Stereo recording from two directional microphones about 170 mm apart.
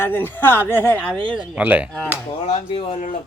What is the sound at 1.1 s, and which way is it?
Speech, 30° right (ahead or behind).